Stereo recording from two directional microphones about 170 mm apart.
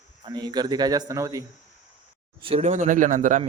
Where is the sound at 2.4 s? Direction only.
35° right (ahead or behind).